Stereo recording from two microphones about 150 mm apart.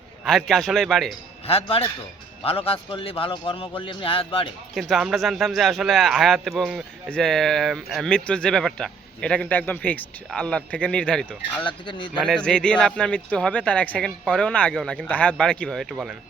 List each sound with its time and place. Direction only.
0.3 s speech: centre (ahead or behind)
1.5 s a man's voice: 40° left (ahead or behind)
4.7 s speech: centre (ahead or behind)
11.6 s a man's voice: 35° left (ahead or behind)
12.1 s speech: centre (ahead or behind)